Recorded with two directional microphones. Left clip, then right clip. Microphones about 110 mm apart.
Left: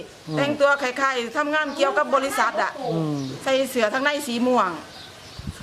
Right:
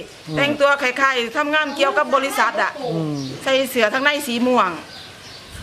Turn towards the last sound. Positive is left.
turn(degrees=0)  # may be behind; listen again after turning